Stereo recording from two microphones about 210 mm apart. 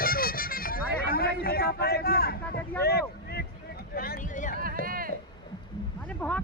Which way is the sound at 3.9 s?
45° left (ahead or behind).